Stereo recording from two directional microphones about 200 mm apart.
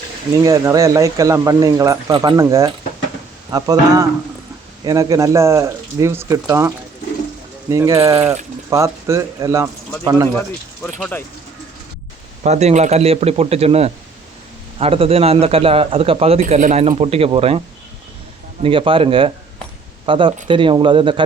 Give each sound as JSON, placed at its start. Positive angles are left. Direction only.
{"t": 0.4, "sound": "a man's voice", "side_deg": -15}
{"t": 7.9, "sound": "a man's voice", "side_deg": -30}
{"t": 8.7, "sound": "a man's voice", "side_deg": -15}
{"t": 12.4, "sound": "a man's voice", "side_deg": -35}
{"t": 16.4, "sound": "a man's voice", "side_deg": -40}
{"t": 18.6, "sound": "a man's voice", "side_deg": -25}